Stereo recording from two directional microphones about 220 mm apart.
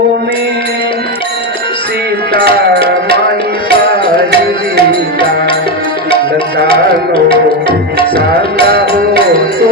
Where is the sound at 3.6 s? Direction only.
25° left (ahead or behind).